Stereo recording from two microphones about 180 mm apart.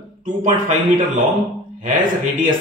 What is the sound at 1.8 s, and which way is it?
Speech, 50° right (ahead or behind).